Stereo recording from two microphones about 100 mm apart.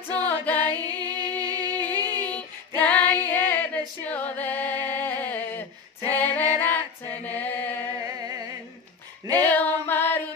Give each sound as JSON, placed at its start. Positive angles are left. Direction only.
{"t": 0.3, "sound": "music", "side_deg": 20}
{"t": 0.8, "sound": "music", "side_deg": -40}
{"t": 2.0, "sound": "female singing", "side_deg": 15}
{"t": 8.0, "sound": "music", "side_deg": -35}
{"t": 9.4, "sound": "music", "side_deg": 20}